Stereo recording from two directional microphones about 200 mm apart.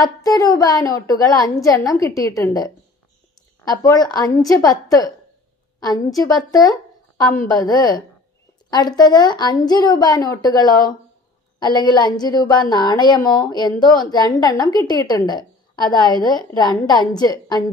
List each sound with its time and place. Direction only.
0.0 s a woman's voice: 15° left (ahead or behind)
6.1 s a woman's voice: 20° left (ahead or behind)